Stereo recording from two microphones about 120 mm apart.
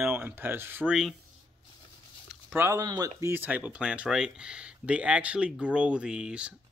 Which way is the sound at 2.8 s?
30° right (ahead or behind).